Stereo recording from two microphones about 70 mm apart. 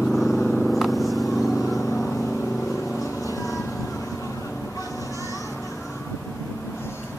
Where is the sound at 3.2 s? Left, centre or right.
Left.